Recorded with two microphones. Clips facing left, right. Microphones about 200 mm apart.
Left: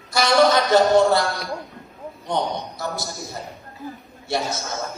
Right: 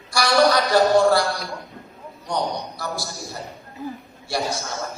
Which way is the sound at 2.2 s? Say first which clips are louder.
Left 1 dB; 20° left (ahead or behind).